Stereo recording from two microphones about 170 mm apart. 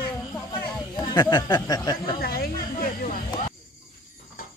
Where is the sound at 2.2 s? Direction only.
65° left (ahead or behind).